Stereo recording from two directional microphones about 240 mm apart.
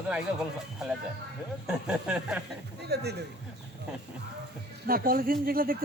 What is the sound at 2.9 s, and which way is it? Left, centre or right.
Speech, right.